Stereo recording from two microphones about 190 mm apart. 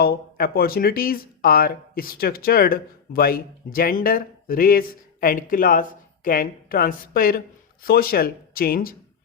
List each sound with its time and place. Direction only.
0.0 s speech: 55° left (ahead or behind)